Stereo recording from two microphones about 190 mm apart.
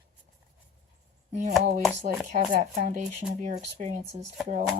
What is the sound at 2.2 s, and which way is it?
Speech, 40° right (ahead or behind).